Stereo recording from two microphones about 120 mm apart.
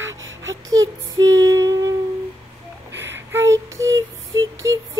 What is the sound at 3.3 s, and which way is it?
Child singing, 25° right (ahead or behind).